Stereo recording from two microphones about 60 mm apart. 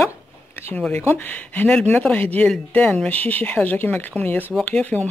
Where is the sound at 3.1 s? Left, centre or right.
Left.